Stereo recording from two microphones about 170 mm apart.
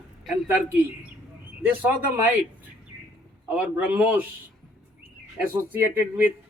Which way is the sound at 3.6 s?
10° right (ahead or behind).